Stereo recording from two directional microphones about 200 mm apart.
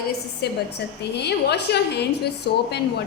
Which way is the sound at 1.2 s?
55° left (ahead or behind).